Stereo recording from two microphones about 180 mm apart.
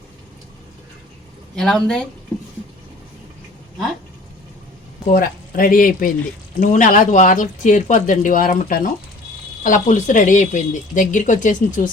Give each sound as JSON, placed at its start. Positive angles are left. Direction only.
{"t": 1.5, "sound": "speech", "side_deg": 5}
{"t": 5.0, "sound": "speech", "side_deg": 50}